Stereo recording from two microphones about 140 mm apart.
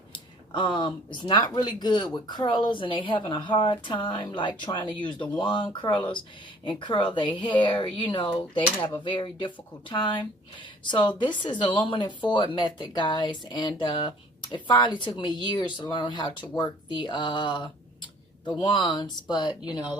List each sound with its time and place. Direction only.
0.1 s speech: 35° left (ahead or behind)